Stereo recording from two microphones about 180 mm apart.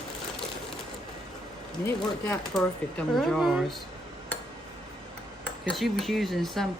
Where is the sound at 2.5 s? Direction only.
Centre (ahead or behind).